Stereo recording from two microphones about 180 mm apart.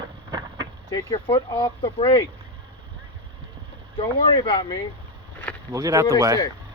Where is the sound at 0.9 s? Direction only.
20° left (ahead or behind).